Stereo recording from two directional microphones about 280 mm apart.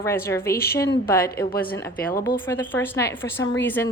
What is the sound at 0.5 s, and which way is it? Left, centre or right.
Speech, left.